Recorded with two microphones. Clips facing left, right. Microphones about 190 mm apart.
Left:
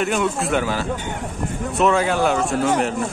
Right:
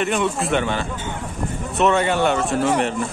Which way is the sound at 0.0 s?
Centre (ahead or behind).